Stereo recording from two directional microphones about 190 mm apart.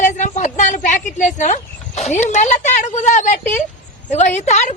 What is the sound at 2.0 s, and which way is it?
Speech, 35° left (ahead or behind).